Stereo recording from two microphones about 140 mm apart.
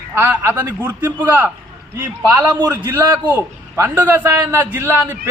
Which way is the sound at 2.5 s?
30° right (ahead or behind).